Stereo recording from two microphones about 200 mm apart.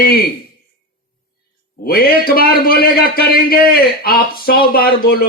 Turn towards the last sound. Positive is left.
turn(degrees=50)  # may be behind; listen again after turning